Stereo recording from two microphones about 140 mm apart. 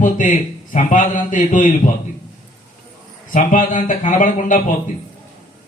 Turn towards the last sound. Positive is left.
turn(degrees=70)  # may be behind; listen again after turning